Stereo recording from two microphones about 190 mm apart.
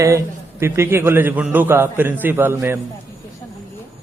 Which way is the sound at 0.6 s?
10° right (ahead or behind).